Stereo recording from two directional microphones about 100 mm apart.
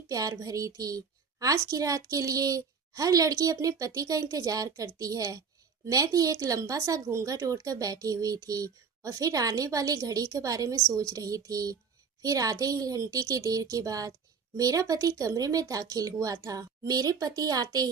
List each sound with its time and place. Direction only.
0.1 s a woman's voice: 35° right (ahead or behind)